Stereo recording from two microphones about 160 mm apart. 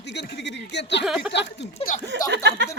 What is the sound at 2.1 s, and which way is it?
Speech, 90° right.